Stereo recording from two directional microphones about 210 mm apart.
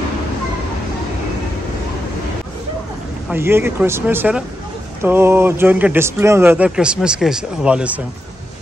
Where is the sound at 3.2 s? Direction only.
10° right (ahead or behind).